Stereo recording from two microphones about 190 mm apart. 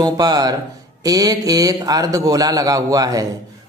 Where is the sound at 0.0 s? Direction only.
20° right (ahead or behind).